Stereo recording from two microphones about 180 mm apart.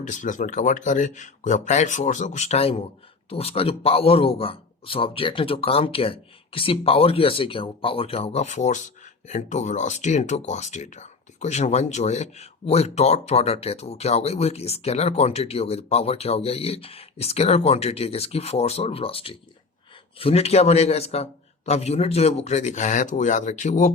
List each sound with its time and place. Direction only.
0.0 s a man's voice: 45° left (ahead or behind)